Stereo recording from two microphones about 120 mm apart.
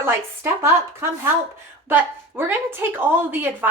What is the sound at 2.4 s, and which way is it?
A woman's voice, 20° right (ahead or behind).